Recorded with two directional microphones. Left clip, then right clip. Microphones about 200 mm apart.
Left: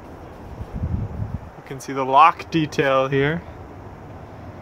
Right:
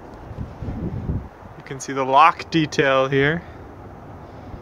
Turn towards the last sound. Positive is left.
turn(degrees=0)  # may be behind; listen again after turning